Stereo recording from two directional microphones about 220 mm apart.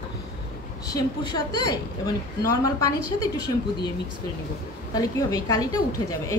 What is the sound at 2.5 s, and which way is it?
Speech, 15° left (ahead or behind).